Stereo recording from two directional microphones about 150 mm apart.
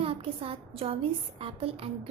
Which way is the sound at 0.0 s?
40° right (ahead or behind).